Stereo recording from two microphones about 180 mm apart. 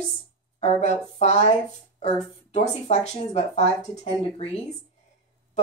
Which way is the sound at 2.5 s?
35° left (ahead or behind).